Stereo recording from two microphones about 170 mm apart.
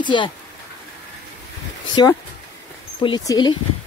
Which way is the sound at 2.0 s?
25° left (ahead or behind).